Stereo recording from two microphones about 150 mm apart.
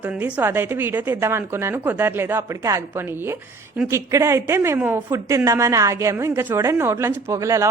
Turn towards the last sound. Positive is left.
turn(degrees=-20)  # may be behind; listen again after turning